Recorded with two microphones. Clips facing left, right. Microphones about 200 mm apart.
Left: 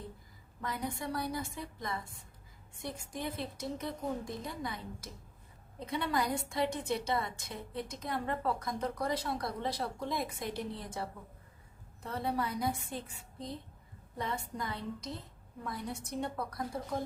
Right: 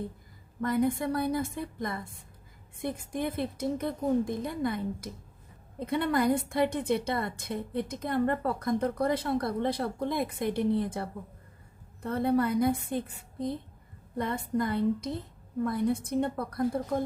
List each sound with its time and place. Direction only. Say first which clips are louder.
0.6 s a woman's voice: right 11 dB; 55° right (ahead or behind)